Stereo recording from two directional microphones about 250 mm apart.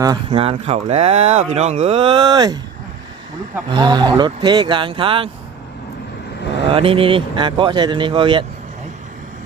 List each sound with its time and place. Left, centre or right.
0.0 s speech: centre
3.7 s speech: centre
6.7 s speech: right